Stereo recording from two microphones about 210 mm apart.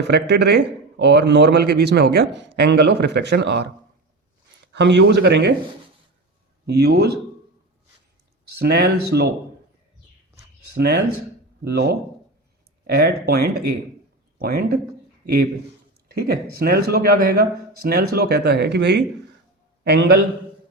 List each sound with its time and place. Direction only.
0.1 s a man's voice: 55° right (ahead or behind)
6.7 s a man's voice: 50° right (ahead or behind)
8.5 s a man's voice: 50° right (ahead or behind)
10.8 s a man's voice: 50° right (ahead or behind)
16.0 s a man's voice: 50° right (ahead or behind)